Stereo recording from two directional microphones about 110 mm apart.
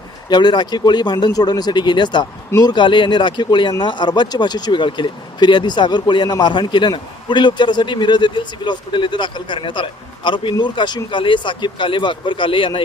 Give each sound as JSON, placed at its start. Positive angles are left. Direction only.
{"t": 0.3, "sound": "speech", "side_deg": 40}